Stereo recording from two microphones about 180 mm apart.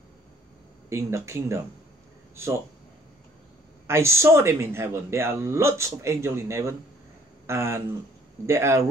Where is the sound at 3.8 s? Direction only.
15° right (ahead or behind).